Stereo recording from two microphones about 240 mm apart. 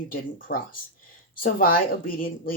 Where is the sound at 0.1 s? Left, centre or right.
Left.